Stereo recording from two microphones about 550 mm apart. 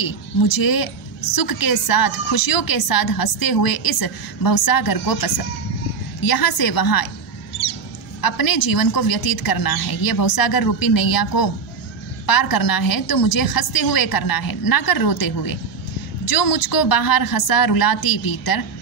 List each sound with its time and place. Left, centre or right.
0.0 s a woman's voice: left
8.2 s a woman's voice: left